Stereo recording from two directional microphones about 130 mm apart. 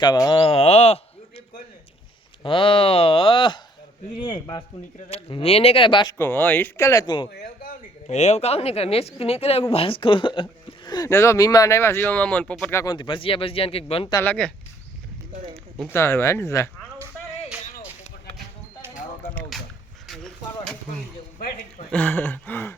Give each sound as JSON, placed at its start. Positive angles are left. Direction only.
{"t": 0.0, "sound": "speech", "side_deg": 35}
{"t": 2.4, "sound": "a sound", "side_deg": 45}
{"t": 5.0, "sound": "speech", "side_deg": 50}
{"t": 6.1, "sound": "speech", "side_deg": 15}
{"t": 7.6, "sound": "speech", "side_deg": 60}
{"t": 11.1, "sound": "speech", "side_deg": 20}
{"t": 12.7, "sound": "speech", "side_deg": 30}
{"t": 14.3, "sound": "a sound", "side_deg": 10}
{"t": 15.9, "sound": "speech", "side_deg": 20}
{"t": 19.2, "sound": "boat", "side_deg": 15}
{"t": 20.1, "sound": "a sound", "side_deg": 5}
{"t": 21.9, "sound": "a sound", "side_deg": 10}